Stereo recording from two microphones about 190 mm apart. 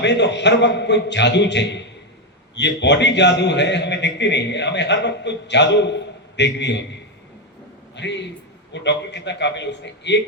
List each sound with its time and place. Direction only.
0.0 s a man's voice: 65° left (ahead or behind)
7.9 s a man's voice: 65° left (ahead or behind)